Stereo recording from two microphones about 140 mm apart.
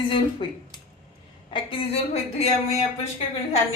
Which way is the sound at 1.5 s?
40° left (ahead or behind).